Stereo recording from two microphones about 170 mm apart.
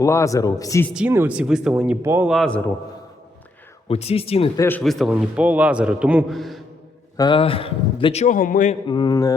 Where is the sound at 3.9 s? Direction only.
35° left (ahead or behind).